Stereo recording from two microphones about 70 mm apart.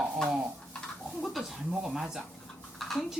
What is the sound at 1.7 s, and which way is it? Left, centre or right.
Speech, centre.